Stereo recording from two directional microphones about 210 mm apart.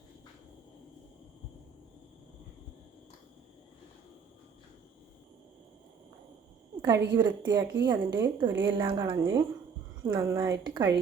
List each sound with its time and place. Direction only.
6.8 s a woman's voice: 20° right (ahead or behind)